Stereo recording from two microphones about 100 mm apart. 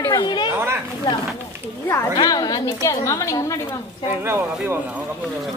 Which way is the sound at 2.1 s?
45° left (ahead or behind).